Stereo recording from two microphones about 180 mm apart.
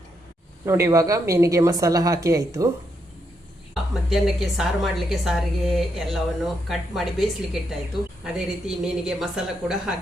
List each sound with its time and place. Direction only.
0.6 s a woman's voice: 15° right (ahead or behind)
4.1 s speech: centre (ahead or behind)